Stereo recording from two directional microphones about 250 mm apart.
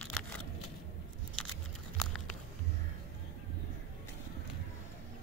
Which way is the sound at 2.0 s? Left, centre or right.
Centre.